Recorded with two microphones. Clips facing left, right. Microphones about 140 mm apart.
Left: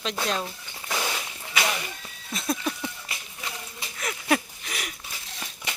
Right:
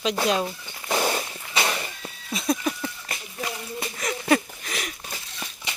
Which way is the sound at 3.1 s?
50° right (ahead or behind).